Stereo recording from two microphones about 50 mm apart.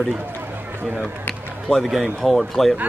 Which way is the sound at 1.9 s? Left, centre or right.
Centre.